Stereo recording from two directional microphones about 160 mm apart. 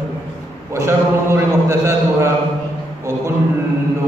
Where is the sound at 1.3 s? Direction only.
15° right (ahead or behind).